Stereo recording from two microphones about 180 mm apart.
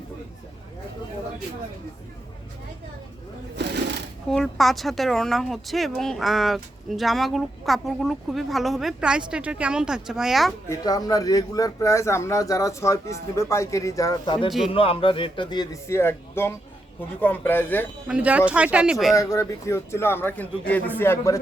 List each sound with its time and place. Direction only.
4.3 s speech: centre (ahead or behind)
10.7 s a man's voice: 20° left (ahead or behind)
18.1 s speech: 10° right (ahead or behind)
19.1 s speech: 15° left (ahead or behind)